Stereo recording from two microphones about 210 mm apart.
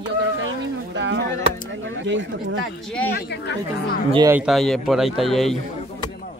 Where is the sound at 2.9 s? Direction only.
5° left (ahead or behind).